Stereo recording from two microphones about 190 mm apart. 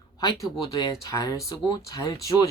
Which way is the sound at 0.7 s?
20° left (ahead or behind).